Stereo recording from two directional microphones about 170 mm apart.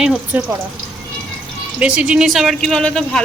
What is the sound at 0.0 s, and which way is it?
Speech, 5° right (ahead or behind).